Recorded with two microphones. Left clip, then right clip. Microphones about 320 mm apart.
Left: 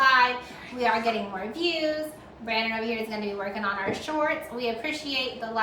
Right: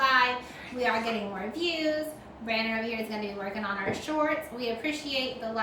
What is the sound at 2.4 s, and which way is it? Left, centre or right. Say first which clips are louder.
Speech: left 2 dB; centre.